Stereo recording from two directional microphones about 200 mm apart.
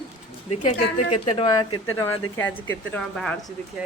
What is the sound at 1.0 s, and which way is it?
Speech, 30° left (ahead or behind).